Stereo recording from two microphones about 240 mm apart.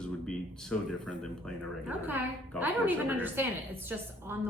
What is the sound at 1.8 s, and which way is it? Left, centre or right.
A woman's voice, centre.